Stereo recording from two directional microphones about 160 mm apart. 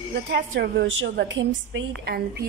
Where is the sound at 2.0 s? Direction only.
80° right.